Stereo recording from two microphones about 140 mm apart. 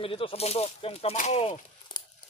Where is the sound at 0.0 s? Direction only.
40° left (ahead or behind).